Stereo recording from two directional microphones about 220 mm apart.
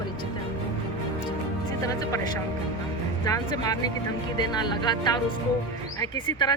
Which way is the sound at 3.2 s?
15° left (ahead or behind).